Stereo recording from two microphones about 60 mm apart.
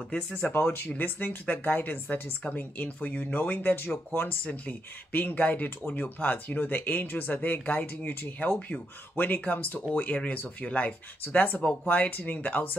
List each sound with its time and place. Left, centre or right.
0.1 s speech: centre
0.5 s speech: left